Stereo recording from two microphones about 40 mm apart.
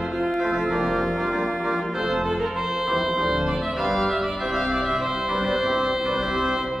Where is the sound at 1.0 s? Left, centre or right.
Centre.